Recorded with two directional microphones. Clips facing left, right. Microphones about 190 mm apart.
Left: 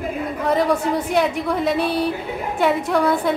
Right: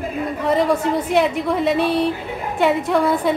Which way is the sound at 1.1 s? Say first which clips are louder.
Right 3 dB; centre (ahead or behind).